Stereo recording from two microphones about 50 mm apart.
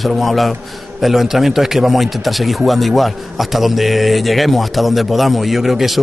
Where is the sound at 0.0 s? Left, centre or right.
Centre.